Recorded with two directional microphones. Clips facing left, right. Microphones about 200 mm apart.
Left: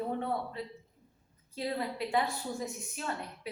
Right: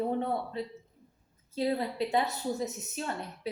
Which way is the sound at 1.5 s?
25° right (ahead or behind).